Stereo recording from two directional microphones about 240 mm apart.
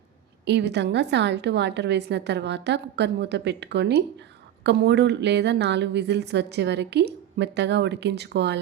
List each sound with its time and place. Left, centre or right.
0.4 s a woman's voice: right